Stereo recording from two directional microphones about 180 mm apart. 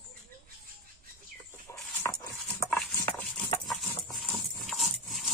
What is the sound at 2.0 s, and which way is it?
Dog, 15° left (ahead or behind).